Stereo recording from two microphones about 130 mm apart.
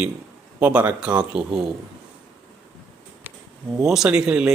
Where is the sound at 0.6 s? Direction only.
10° right (ahead or behind).